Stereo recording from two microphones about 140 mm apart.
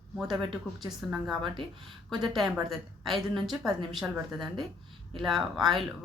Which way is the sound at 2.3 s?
Centre (ahead or behind).